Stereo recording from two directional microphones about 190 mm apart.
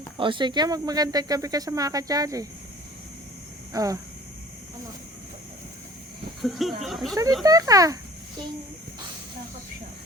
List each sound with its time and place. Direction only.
0.2 s speech: 25° right (ahead or behind)
3.7 s speech: 15° right (ahead or behind)
6.4 s speech: centre (ahead or behind)
7.4 s speech: 20° right (ahead or behind)